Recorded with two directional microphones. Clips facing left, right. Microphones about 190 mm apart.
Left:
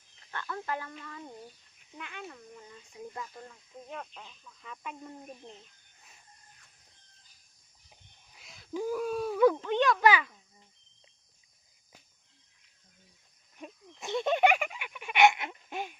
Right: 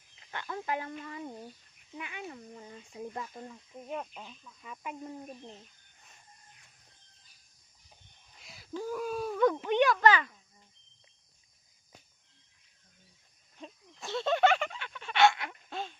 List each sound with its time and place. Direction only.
0.3 s speech: 15° right (ahead or behind)
3.5 s speech: 15° right (ahead or behind)
8.3 s wheeze: centre (ahead or behind)
8.7 s speech: 10° left (ahead or behind)
9.0 s speech: centre (ahead or behind)
9.6 s speech: 10° right (ahead or behind)
10.0 s speech: 10° left (ahead or behind)
13.6 s a sound: 15° left (ahead or behind)